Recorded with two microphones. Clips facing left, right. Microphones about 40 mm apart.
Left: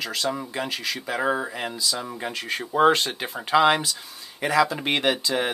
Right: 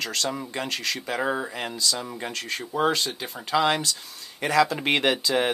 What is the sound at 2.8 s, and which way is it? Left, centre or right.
Speech, left.